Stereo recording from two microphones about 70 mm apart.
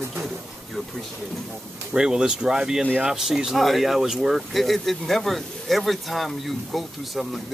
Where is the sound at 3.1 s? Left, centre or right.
Centre.